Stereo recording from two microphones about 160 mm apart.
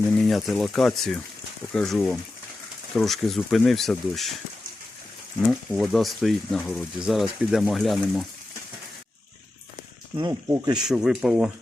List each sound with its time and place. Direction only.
0.1 s speech: centre (ahead or behind)
5.5 s speech: centre (ahead or behind)
10.1 s speech: 15° right (ahead or behind)
10.8 s speech: 5° right (ahead or behind)